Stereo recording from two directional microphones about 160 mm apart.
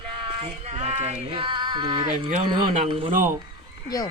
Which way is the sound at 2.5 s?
30° right (ahead or behind).